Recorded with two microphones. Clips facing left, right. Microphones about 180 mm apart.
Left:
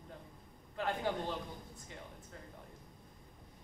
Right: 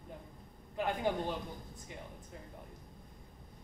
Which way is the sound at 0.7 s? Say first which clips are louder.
Right 3 dB; 15° right (ahead or behind).